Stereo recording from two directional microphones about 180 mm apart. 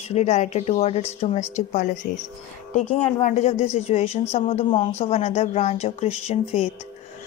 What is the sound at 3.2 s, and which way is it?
Speech, 45° left (ahead or behind).